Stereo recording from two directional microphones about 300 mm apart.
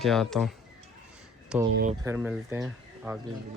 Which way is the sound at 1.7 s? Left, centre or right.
Right.